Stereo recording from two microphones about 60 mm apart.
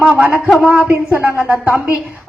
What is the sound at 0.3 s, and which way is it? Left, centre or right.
A woman's voice, right.